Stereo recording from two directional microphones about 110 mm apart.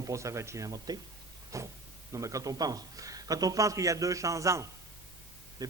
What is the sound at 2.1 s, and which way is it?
Speech, 30° right (ahead or behind).